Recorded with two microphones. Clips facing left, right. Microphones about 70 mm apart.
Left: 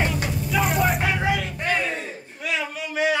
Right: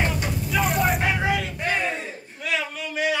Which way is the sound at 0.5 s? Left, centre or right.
Centre.